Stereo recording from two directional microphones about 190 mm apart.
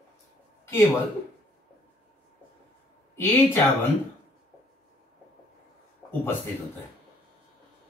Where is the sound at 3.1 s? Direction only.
15° left (ahead or behind).